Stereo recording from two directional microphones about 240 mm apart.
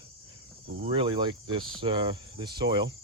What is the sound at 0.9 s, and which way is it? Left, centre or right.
Speech, right.